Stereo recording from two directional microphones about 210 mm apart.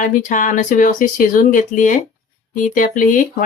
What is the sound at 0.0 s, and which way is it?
Speech, 35° left (ahead or behind).